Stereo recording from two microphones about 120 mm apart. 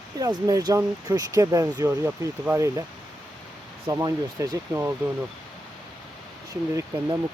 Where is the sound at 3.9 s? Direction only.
30° right (ahead or behind).